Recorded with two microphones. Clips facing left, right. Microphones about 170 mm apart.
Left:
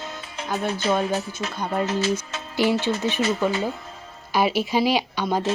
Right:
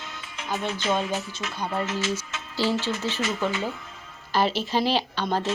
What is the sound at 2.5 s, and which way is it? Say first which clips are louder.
Speech: left 4 dB; 15° left (ahead or behind).